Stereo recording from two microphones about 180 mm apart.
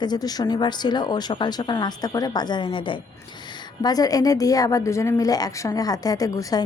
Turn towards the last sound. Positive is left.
turn(degrees=20)  # may be behind; listen again after turning